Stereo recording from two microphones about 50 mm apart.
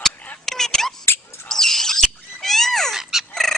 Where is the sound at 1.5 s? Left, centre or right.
Centre.